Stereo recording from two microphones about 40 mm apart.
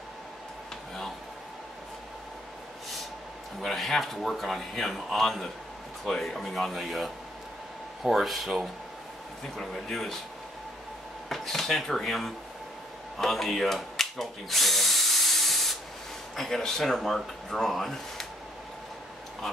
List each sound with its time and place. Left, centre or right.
3.6 s speech: centre
9.8 s speech: centre
11.2 s speech: centre
13.2 s drill: centre
16.3 s speech: centre